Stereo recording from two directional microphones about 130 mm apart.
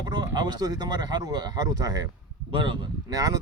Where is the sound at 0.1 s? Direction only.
30° right (ahead or behind).